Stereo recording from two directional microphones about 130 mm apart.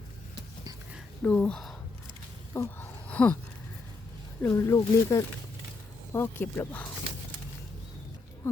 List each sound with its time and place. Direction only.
1.2 s speech: 10° left (ahead or behind)
2.5 s a sound: 15° left (ahead or behind)
4.4 s speech: 20° left (ahead or behind)